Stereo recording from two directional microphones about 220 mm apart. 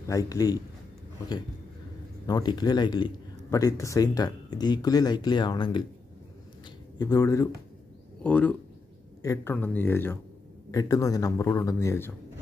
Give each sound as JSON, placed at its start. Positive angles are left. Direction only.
{"t": 0.1, "sound": "speech", "side_deg": 15}
{"t": 2.2, "sound": "speech", "side_deg": 20}
{"t": 7.0, "sound": "speech", "side_deg": 15}